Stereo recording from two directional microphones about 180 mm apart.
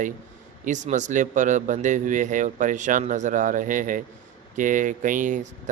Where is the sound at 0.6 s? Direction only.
45° right (ahead or behind).